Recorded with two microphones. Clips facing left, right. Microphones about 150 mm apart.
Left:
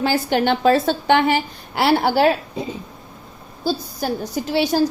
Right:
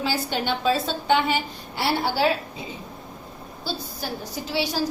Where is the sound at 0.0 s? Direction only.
60° left (ahead or behind); by 2.0 s 80° left.